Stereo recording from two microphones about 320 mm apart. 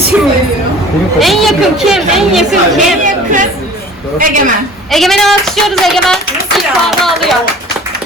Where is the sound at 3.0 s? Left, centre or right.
Right.